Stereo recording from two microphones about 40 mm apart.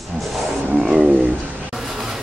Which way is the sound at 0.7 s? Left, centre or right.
Right.